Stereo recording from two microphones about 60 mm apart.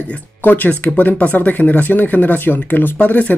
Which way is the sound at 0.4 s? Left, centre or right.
Left.